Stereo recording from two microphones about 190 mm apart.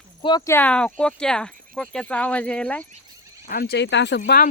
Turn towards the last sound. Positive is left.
turn(degrees=65)  # may be behind; listen again after turning